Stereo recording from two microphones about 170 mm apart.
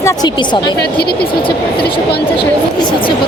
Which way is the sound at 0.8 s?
70° left (ahead or behind).